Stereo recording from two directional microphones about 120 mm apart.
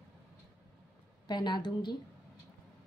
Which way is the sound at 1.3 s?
40° left (ahead or behind).